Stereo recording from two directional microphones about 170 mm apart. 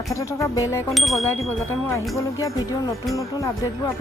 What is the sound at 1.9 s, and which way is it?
Speech, 20° left (ahead or behind).